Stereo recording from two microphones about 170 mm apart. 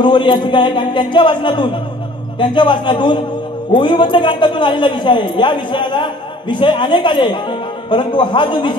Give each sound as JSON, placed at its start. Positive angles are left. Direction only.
{"t": 0.0, "sound": "a man's voice", "side_deg": 25}